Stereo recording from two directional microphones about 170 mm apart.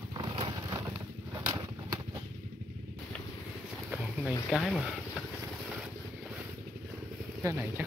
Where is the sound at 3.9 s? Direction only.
5° right (ahead or behind).